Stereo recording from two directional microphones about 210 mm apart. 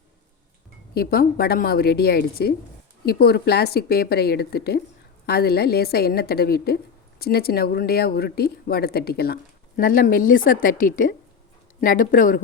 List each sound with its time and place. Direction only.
0.9 s speech: 45° left (ahead or behind)